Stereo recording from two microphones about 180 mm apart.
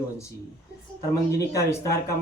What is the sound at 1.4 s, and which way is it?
Speech, 15° left (ahead or behind).